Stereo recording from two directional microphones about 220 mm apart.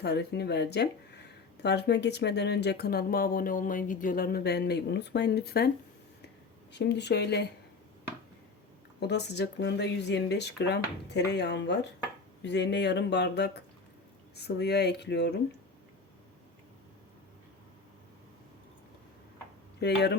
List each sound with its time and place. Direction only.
0.0 s speech: 50° left (ahead or behind)
6.7 s speech: 50° left (ahead or behind)
9.0 s speech: 50° left (ahead or behind)
19.8 s speech: 50° left (ahead or behind)